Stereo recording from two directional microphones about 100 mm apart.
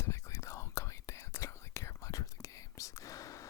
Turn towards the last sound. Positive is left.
turn(degrees=35)  # may be behind; listen again after turning